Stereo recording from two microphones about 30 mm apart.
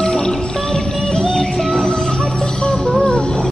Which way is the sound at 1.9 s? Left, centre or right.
Left.